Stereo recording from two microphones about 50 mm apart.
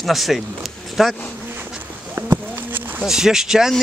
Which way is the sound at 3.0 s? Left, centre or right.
Centre.